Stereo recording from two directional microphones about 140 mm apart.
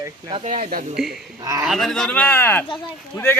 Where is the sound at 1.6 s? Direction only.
Centre (ahead or behind); by 3.4 s 15° left (ahead or behind).